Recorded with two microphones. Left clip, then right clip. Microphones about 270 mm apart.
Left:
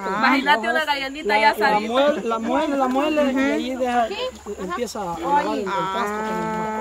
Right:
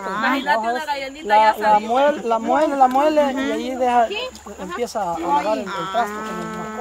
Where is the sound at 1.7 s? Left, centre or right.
Right.